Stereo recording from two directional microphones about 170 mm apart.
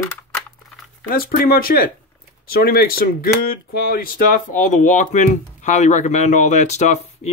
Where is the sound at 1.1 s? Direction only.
60° left (ahead or behind).